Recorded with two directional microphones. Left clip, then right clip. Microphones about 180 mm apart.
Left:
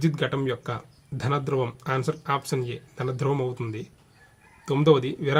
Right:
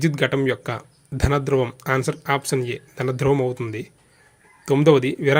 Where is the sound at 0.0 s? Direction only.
20° right (ahead or behind).